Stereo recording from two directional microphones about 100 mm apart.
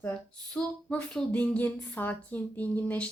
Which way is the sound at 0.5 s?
10° left (ahead or behind).